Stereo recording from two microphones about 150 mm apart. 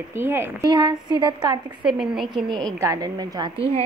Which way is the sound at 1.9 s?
Centre (ahead or behind).